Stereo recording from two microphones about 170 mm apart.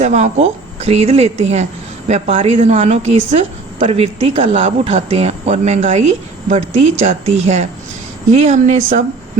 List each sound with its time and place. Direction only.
0.0 s a woman's voice: 40° right (ahead or behind)